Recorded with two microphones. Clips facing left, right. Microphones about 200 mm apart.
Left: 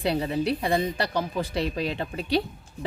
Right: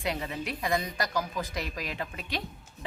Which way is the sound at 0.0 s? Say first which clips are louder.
Left 8 dB; 35° left (ahead or behind).